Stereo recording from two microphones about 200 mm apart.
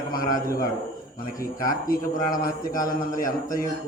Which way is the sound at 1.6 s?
45° left (ahead or behind).